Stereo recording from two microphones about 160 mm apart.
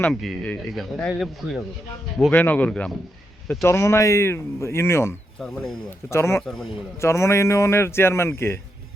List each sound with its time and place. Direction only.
0.0 s a man's voice: centre (ahead or behind)
5.4 s speech: centre (ahead or behind)
6.1 s a man's voice: 15° left (ahead or behind)
6.4 s speech: 5° left (ahead or behind)
7.0 s a man's voice: 15° left (ahead or behind)